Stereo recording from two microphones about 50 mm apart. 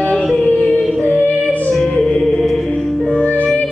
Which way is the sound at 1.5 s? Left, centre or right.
Left.